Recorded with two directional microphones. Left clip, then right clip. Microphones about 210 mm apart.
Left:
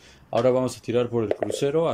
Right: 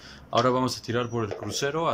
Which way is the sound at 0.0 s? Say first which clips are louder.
Left 2 dB; 10° left (ahead or behind).